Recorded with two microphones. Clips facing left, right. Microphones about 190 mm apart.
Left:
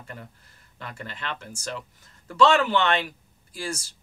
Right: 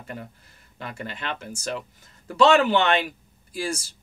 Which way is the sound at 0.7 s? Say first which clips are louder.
Right 4 dB; 15° right (ahead or behind).